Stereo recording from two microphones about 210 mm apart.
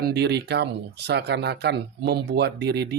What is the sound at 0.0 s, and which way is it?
Speech, 50° right (ahead or behind).